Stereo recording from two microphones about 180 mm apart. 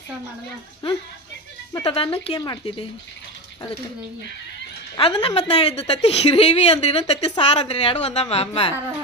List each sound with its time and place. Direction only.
1.8 s speech: 30° left (ahead or behind)
4.9 s a woman's voice: 35° left (ahead or behind)